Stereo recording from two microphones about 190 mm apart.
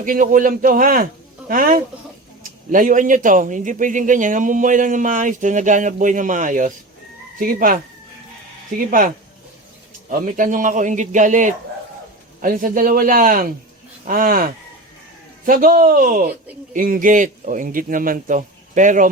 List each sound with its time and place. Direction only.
0.0 s speech: 45° right (ahead or behind)
10.1 s a man's voice: 45° right (ahead or behind)